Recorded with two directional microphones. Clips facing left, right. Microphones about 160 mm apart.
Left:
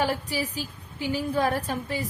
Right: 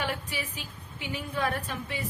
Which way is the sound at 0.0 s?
35° left (ahead or behind).